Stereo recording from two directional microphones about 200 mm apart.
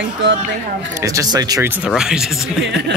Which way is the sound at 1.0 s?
15° right (ahead or behind).